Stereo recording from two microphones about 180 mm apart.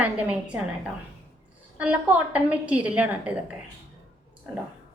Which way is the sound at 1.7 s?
5° right (ahead or behind).